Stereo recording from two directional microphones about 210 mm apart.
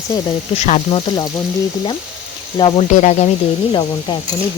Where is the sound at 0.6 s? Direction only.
30° left (ahead or behind).